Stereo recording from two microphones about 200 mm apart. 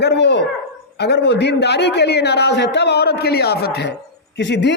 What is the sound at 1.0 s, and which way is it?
A man's voice, 55° left (ahead or behind).